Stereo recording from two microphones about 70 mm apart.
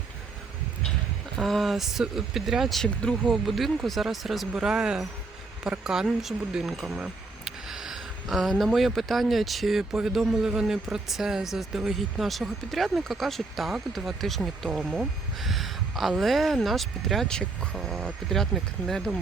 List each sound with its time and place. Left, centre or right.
1.4 s speech: centre